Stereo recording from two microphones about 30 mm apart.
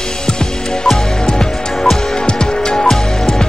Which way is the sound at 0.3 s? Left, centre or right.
Left.